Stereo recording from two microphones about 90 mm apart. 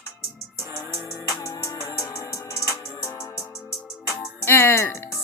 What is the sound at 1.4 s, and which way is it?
Music, 35° left (ahead or behind).